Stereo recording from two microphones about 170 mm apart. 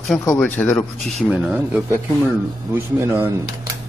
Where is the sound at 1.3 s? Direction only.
5° right (ahead or behind).